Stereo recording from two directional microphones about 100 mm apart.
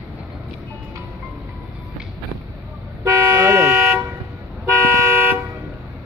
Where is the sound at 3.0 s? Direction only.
25° right (ahead or behind).